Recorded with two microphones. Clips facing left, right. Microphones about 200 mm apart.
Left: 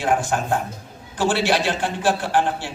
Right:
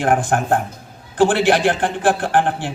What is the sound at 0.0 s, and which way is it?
A man's voice, 55° right (ahead or behind).